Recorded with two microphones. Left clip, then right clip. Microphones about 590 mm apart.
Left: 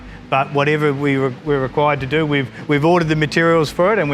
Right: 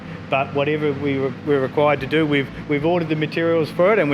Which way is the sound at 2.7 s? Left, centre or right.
Left.